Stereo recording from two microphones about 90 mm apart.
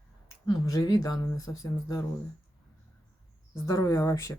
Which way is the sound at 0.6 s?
40° left (ahead or behind).